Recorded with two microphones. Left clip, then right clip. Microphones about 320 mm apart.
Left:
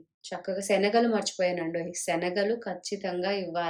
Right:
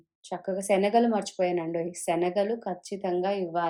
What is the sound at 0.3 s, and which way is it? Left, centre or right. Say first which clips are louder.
Speech: right 1 dB; centre.